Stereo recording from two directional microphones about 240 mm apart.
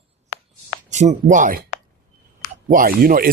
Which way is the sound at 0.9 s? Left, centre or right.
Right.